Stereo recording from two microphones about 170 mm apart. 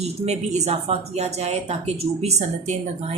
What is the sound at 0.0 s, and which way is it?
Speech, 40° right (ahead or behind).